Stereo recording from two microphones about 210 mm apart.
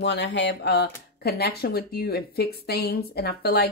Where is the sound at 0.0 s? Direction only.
55° left (ahead or behind).